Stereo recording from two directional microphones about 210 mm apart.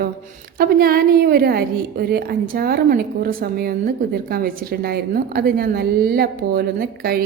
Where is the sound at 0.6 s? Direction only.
45° right (ahead or behind).